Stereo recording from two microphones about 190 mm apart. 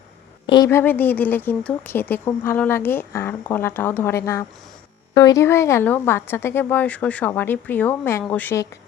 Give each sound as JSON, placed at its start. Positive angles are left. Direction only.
{"t": 0.4, "sound": "a woman's voice", "side_deg": 25}
{"t": 0.7, "sound": "speech", "side_deg": 10}